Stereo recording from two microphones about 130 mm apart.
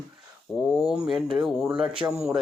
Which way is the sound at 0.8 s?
5° right (ahead or behind).